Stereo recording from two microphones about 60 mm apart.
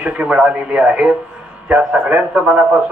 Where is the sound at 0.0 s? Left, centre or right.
Right.